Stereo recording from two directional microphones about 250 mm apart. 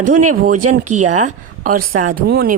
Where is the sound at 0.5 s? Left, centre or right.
Right.